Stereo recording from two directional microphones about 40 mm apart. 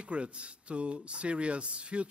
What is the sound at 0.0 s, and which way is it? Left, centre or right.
A man's voice, right.